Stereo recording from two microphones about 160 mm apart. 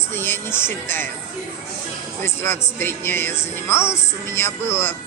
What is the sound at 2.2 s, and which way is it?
Music, 15° left (ahead or behind).